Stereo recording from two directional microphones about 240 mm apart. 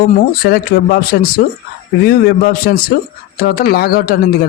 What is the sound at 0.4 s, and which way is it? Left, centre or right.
Speech, left.